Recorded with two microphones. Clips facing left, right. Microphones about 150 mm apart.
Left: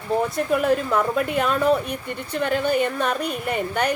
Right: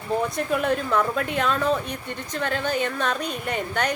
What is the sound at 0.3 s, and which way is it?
A woman's voice, 5° left (ahead or behind).